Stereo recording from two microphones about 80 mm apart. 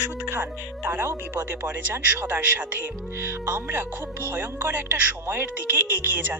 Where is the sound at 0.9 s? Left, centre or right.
Right.